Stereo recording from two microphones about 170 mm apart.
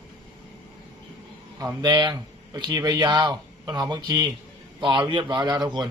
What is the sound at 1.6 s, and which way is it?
Speech, 20° right (ahead or behind).